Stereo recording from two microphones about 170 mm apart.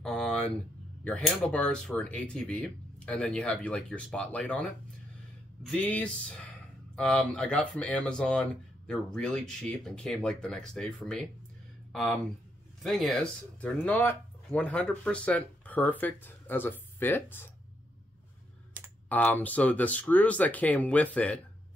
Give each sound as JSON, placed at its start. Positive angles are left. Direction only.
{"t": 0.0, "sound": "a sound", "side_deg": 5}
{"t": 1.0, "sound": "speech", "side_deg": 0}
{"t": 5.7, "sound": "speech", "side_deg": 10}
{"t": 19.0, "sound": "speech", "side_deg": 10}